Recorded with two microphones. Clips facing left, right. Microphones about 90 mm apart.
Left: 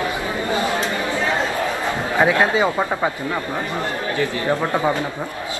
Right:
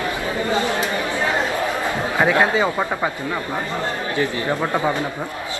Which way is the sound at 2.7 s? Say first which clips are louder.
Left 1 dB; 5° left (ahead or behind).